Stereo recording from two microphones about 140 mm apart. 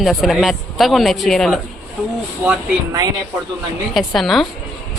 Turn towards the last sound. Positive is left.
turn(degrees=0)  # may be behind; listen again after turning